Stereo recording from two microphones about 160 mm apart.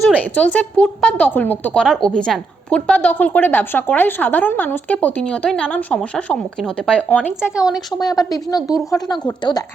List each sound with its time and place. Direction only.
0.2 s a woman's voice: 10° left (ahead or behind)
8.0 s speech: 20° left (ahead or behind)
8.6 s speech: 5° right (ahead or behind)
8.9 s speech: 25° left (ahead or behind)